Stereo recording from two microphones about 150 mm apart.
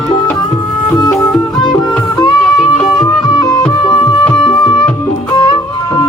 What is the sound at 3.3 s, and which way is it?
Music, 25° left (ahead or behind).